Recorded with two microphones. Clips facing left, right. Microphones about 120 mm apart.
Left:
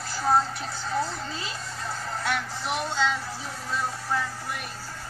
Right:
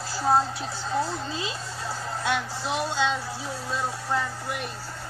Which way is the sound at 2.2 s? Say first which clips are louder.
Right 3 dB; 20° right (ahead or behind).